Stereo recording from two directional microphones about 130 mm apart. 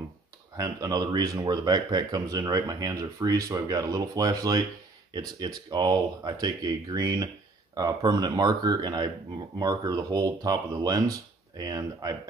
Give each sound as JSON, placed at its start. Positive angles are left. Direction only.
{"t": 0.6, "sound": "speech", "side_deg": -30}